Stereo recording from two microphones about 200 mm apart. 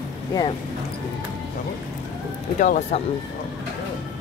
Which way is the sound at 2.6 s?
40° left (ahead or behind).